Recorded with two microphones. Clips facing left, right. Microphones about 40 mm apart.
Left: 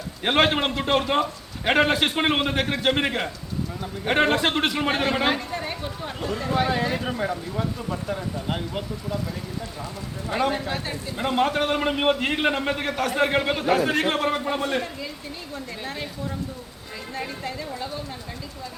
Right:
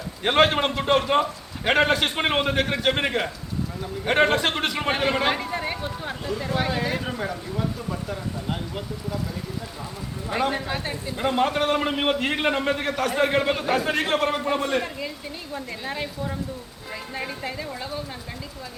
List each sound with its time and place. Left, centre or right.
0.2 s a man's voice: centre
5.3 s a woman's voice: centre
10.2 s a man's voice: centre
15.9 s speech: centre